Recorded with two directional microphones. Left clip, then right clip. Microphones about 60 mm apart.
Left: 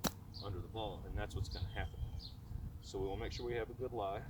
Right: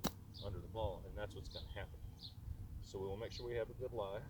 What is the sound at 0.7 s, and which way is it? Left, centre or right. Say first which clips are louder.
Speech: right 2 dB; left.